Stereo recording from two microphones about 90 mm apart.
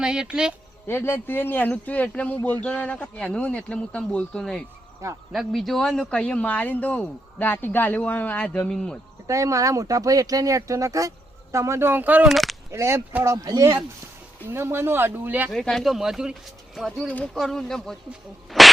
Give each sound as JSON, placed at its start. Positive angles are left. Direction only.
{"t": 0.0, "sound": "speech", "side_deg": -10}
{"t": 0.9, "sound": "speech", "side_deg": 25}
{"t": 9.2, "sound": "speech", "side_deg": -35}
{"t": 12.2, "sound": "speech", "side_deg": 0}
{"t": 12.7, "sound": "speech", "side_deg": -30}
{"t": 14.4, "sound": "speech", "side_deg": -25}
{"t": 15.4, "sound": "speech", "side_deg": 5}
{"t": 18.5, "sound": "a sound", "side_deg": 0}